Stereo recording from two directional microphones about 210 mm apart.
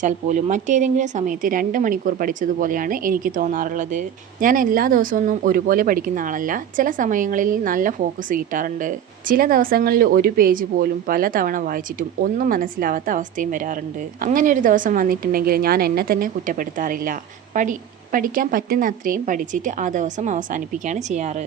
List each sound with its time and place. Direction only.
0.0 s a woman's voice: 35° right (ahead or behind)